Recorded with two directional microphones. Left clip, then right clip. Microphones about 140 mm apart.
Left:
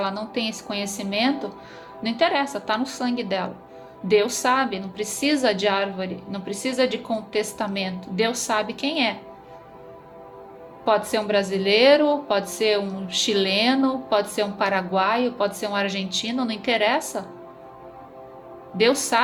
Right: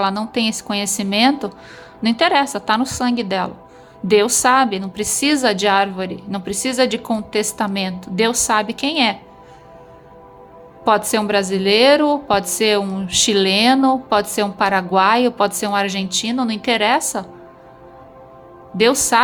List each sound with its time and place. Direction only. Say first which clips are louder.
0.0 s a woman's voice: right 7 dB; 45° right (ahead or behind)
10.8 s a woman's voice: right 5 dB; 40° right (ahead or behind)
18.8 s a woman's voice: right 5 dB; 35° right (ahead or behind)